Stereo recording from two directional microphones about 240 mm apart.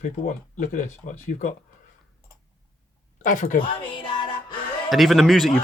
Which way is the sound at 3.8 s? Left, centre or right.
Centre.